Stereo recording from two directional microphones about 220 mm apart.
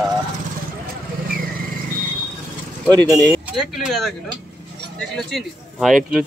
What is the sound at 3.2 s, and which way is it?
Speech, centre (ahead or behind).